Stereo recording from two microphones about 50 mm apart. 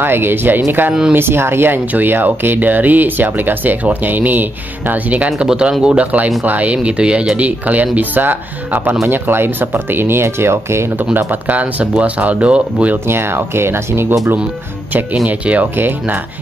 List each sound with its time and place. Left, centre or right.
0.0 s speech: right
5.5 s speech: centre
6.4 s speech: right
11.1 s speech: right
12.9 s speech: right
15.2 s speech: right
15.7 s speech: right